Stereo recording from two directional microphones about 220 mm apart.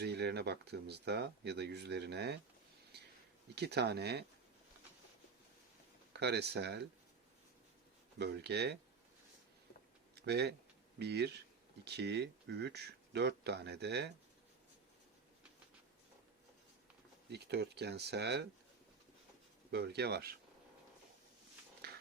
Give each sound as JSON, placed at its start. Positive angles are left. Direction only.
{"t": 0.0, "sound": "speech", "side_deg": -50}
{"t": 2.9, "sound": "a sound", "side_deg": -50}
{"t": 3.5, "sound": "speech", "side_deg": -50}
{"t": 6.1, "sound": "speech", "side_deg": -50}
{"t": 8.2, "sound": "speech", "side_deg": -50}
{"t": 10.2, "sound": "speech", "side_deg": -50}
{"t": 17.2, "sound": "speech", "side_deg": -50}
{"t": 19.7, "sound": "speech", "side_deg": -50}
{"t": 21.8, "sound": "dog", "side_deg": -45}